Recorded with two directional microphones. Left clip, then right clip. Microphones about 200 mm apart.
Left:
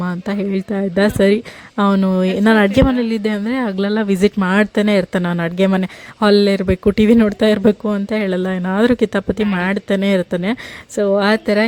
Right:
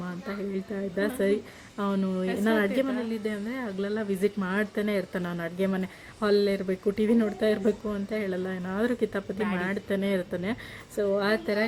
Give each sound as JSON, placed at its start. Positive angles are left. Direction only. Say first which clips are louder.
{"t": 0.0, "sound": "a woman's voice", "louder": "left 13 dB", "side_deg": 40}